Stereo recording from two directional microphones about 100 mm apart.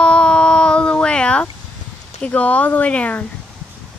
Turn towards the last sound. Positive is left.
turn(degrees=15)  # may be behind; listen again after turning